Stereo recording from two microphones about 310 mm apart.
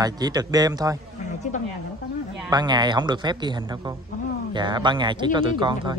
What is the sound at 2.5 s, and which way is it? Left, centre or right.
A man's voice, centre.